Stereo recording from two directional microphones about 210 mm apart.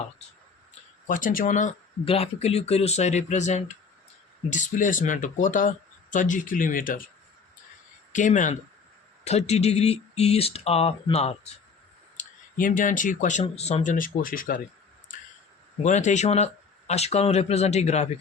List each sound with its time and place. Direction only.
1.0 s speech: 40° left (ahead or behind)
8.1 s speech: 35° left (ahead or behind)
15.8 s speech: 35° left (ahead or behind)